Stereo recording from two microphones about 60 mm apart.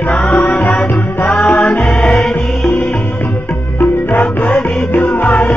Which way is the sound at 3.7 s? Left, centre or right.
Left.